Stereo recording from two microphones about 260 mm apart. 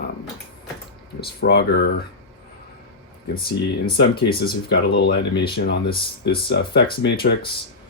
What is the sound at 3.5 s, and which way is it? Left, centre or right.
Speech, left.